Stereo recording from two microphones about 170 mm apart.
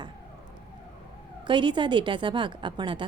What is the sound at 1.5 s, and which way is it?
A woman's voice, 30° right (ahead or behind).